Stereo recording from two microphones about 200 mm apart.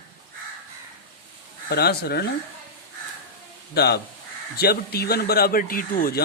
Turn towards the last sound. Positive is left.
turn(degrees=45)  # may be behind; listen again after turning